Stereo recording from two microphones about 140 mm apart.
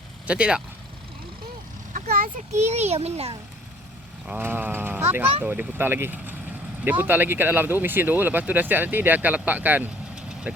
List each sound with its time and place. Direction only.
0.3 s speech: 10° right (ahead or behind)
1.9 s a sound: 80° right
2.6 s a child's voice: 50° right (ahead or behind)
4.3 s speech: 15° right (ahead or behind)